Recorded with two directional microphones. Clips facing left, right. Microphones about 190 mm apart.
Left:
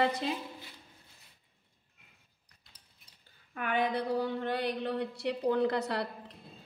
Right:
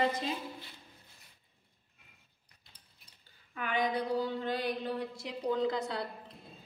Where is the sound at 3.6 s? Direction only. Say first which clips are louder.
Left 1 dB; 60° left (ahead or behind).